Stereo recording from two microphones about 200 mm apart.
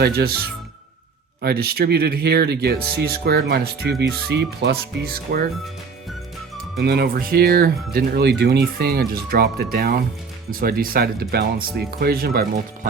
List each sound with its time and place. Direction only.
0.0 s speech: 50° right (ahead or behind)
1.4 s speech: 50° right (ahead or behind)
6.8 s speech: 50° right (ahead or behind)